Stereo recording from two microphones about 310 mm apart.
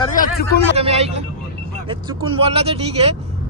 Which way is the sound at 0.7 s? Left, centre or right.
Centre.